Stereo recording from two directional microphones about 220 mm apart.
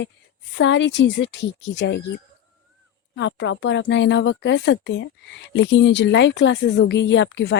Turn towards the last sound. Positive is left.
turn(degrees=50)  # may be behind; listen again after turning